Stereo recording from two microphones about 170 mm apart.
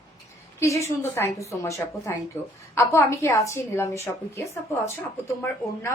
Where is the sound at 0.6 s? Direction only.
15° left (ahead or behind).